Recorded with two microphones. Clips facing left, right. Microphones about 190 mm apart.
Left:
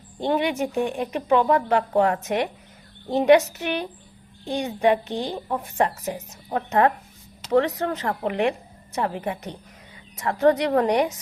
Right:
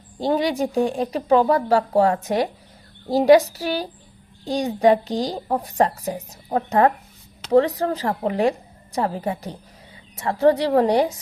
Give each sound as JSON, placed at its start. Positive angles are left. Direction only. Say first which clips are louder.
{"t": 0.2, "sound": "speech", "louder": "right 2 dB", "side_deg": -35}